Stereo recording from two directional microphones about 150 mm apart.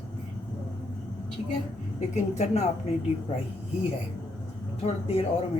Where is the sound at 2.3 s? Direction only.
45° left (ahead or behind).